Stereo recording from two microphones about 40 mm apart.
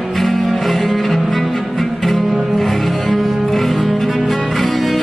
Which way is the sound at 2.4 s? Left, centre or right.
Centre.